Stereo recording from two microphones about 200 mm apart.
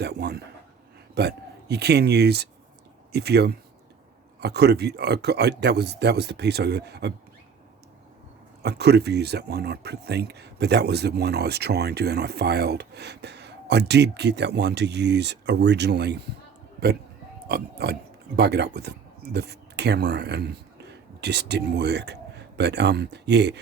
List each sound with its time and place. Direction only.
0.0 s speech: 55° right (ahead or behind)
8.6 s speech: 55° right (ahead or behind)
17.5 s speech: 55° right (ahead or behind)